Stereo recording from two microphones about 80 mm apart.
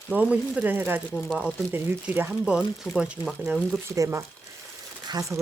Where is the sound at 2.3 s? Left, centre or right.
Centre.